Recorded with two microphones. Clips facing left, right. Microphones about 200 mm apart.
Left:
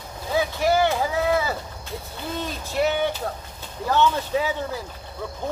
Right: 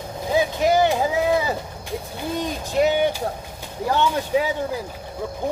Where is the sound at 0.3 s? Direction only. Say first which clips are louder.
Right 2 dB; 20° right (ahead or behind).